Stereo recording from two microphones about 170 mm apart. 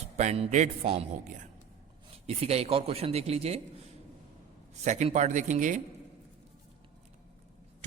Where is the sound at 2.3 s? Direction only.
35° right (ahead or behind).